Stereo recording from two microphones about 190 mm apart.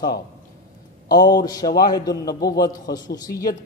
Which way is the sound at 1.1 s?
20° left (ahead or behind).